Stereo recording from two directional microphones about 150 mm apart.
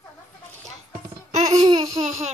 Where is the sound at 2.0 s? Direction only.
50° right (ahead or behind).